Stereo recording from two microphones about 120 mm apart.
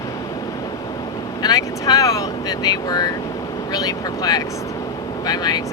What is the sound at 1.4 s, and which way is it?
Speech, 35° left (ahead or behind).